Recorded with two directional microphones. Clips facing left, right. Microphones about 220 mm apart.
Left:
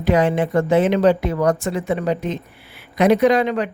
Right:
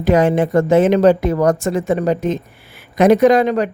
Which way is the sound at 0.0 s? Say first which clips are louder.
Right 4 dB; 45° right (ahead or behind).